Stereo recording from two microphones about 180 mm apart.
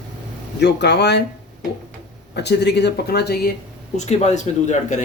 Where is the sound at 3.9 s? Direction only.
40° left (ahead or behind).